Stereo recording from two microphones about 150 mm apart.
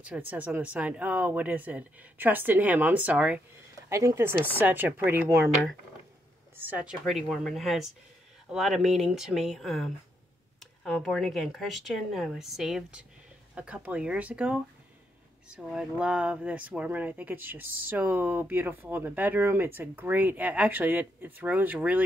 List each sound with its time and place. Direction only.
0.0 s speech: 10° right (ahead or behind)
6.5 s speech: 10° right (ahead or behind)